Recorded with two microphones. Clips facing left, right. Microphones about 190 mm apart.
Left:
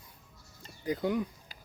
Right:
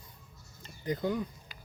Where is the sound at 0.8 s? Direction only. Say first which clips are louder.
Left 1 dB; 10° left (ahead or behind).